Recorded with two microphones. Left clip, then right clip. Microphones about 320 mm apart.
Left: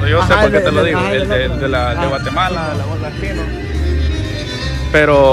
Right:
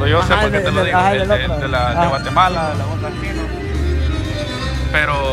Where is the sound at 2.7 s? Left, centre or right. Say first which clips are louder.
Left 1 dB; right.